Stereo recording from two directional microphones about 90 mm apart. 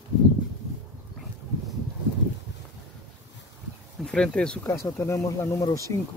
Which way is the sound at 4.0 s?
10° left (ahead or behind).